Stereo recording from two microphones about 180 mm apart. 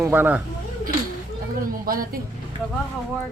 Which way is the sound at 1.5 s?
50° right (ahead or behind).